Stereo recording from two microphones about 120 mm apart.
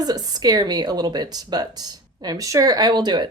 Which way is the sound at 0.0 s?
35° right (ahead or behind).